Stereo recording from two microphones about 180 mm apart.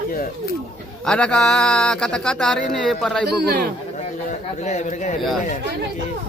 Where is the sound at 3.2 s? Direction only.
60° right (ahead or behind).